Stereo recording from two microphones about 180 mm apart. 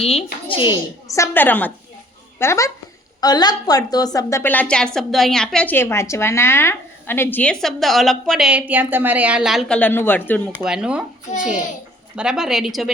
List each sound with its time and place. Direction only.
0.0 s a woman's voice: 35° left (ahead or behind); by 10.6 s 10° left (ahead or behind)
10.6 s a woman's voice: 5° right (ahead or behind)
12.1 s a woman's voice: 5° right (ahead or behind)